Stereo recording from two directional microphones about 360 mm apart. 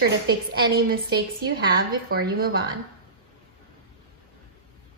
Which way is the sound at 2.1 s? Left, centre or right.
Right.